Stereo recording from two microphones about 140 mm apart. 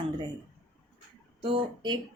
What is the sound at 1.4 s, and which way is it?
Speech, 40° right (ahead or behind).